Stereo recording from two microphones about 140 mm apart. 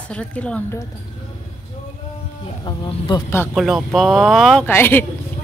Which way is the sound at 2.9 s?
35° left (ahead or behind).